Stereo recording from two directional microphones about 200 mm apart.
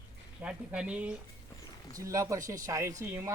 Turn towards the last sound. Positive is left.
turn(degrees=-15)  # may be behind; listen again after turning